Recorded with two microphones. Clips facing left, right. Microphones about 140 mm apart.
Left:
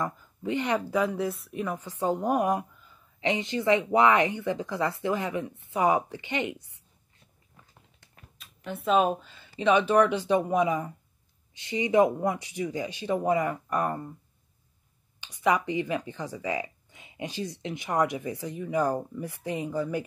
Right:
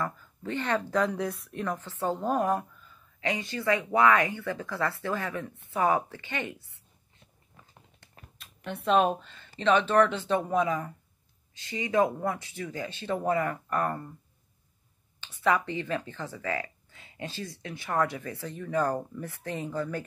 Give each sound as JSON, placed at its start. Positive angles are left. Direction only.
{"t": 0.0, "sound": "speech", "side_deg": 15}
{"t": 8.4, "sound": "speech", "side_deg": 0}
{"t": 15.1, "sound": "speech", "side_deg": 15}